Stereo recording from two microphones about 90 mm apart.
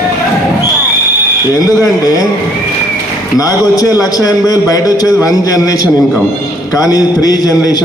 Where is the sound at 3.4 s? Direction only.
40° left (ahead or behind).